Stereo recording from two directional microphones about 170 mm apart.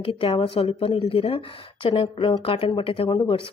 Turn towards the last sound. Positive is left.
turn(degrees=30)  # may be behind; listen again after turning